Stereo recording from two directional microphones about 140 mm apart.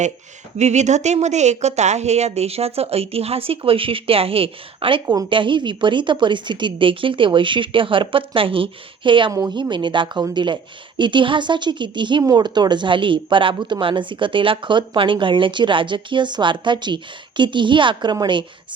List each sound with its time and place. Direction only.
0.6 s a woman's voice: 55° right (ahead or behind); by 18.4 s 30° right (ahead or behind)